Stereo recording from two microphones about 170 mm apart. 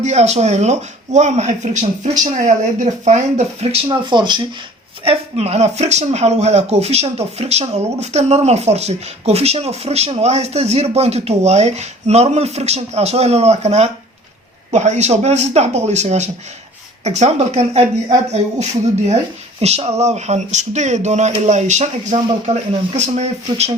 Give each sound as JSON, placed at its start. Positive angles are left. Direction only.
{"t": 0.0, "sound": "speech", "side_deg": -40}
{"t": 3.8, "sound": "speech", "side_deg": -25}
{"t": 5.0, "sound": "speech", "side_deg": -35}